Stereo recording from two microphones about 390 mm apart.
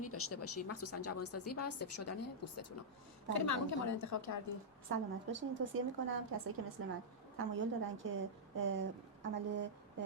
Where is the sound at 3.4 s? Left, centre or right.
Left.